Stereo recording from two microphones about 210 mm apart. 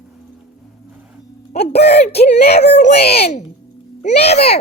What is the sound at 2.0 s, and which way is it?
Speech, 30° left (ahead or behind).